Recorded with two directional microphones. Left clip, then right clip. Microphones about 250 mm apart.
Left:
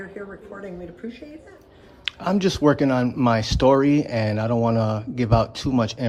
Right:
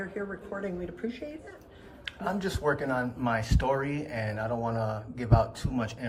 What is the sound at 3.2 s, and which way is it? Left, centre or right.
Speech, centre.